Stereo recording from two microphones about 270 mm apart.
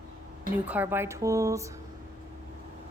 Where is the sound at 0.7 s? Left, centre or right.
Centre.